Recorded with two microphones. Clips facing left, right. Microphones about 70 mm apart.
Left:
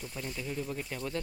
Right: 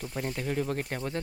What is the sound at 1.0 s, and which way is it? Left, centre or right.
Speech, right.